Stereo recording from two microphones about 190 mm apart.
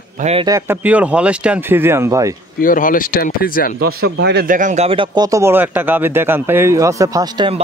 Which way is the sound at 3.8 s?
60° right (ahead or behind).